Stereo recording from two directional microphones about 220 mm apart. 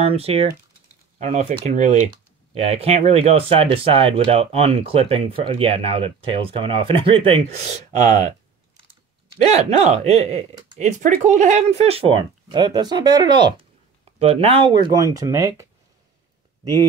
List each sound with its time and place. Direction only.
0.0 s speech: 25° right (ahead or behind)
7.9 s speech: 35° right (ahead or behind)
9.5 s speech: 30° right (ahead or behind); by 15.6 s 10° right (ahead or behind)